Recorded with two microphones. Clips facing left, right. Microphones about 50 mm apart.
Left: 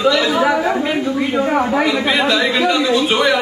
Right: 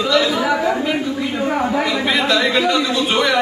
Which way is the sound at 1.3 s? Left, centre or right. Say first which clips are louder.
Left 4 dB; left.